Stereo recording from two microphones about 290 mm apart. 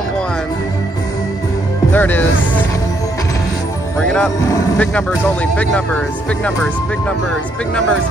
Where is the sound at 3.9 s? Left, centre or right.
Centre.